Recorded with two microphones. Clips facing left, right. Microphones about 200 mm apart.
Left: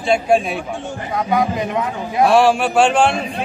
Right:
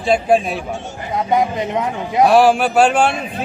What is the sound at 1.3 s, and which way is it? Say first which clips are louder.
Speech: right 1 dB; 20° right (ahead or behind).